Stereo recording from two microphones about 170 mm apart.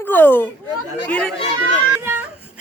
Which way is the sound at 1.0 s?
10° left (ahead or behind).